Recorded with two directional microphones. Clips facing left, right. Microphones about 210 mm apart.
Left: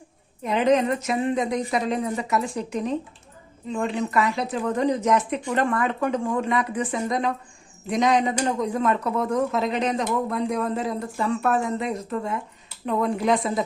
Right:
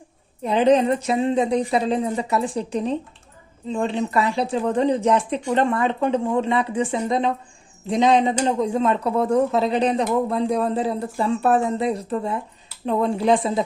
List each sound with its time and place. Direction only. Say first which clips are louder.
0.4 s speech: right 3 dB; 30° right (ahead or behind)